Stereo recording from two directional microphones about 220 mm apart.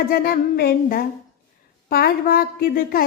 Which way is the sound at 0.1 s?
45° left (ahead or behind).